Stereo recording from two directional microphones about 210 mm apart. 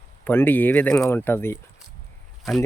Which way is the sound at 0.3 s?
10° left (ahead or behind).